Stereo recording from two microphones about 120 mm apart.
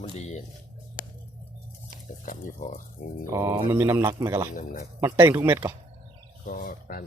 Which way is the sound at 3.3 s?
25° right (ahead or behind).